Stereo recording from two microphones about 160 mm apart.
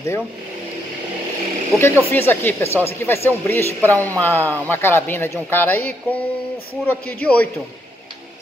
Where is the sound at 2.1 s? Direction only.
10° left (ahead or behind).